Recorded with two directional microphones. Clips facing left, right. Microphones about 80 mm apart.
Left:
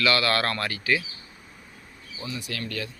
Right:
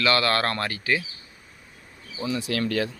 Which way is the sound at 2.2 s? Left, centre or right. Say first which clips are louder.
Right 8 dB; right.